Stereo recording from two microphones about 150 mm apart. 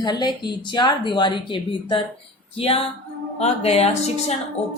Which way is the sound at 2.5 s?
40° left (ahead or behind).